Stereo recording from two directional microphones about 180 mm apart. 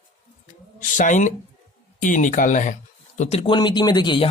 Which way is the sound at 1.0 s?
45° left (ahead or behind).